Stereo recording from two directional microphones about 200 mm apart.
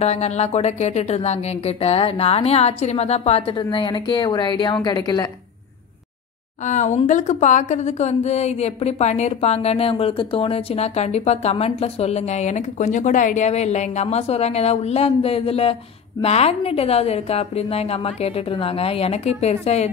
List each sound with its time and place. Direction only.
0.0 s a woman's voice: 35° left (ahead or behind)
6.6 s a woman's voice: 35° left (ahead or behind)